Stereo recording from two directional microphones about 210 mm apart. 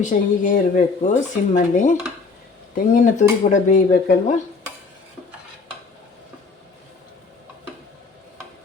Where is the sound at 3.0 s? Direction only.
35° left (ahead or behind).